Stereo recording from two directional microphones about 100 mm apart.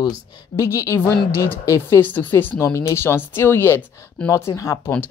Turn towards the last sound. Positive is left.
turn(degrees=30)  # may be behind; listen again after turning